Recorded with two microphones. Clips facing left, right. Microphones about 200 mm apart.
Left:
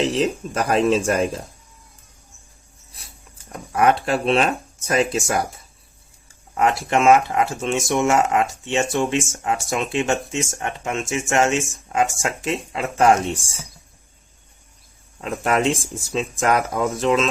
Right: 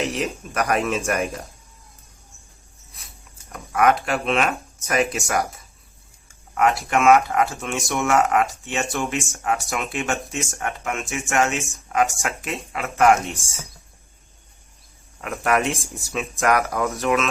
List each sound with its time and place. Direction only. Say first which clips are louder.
0.0 s speech: left 5 dB; 30° left (ahead or behind)
3.5 s speech: left 1 dB; 30° left (ahead or behind)
6.5 s speech: left 1 dB; 25° left (ahead or behind)
15.2 s speech: left 2 dB; 20° left (ahead or behind)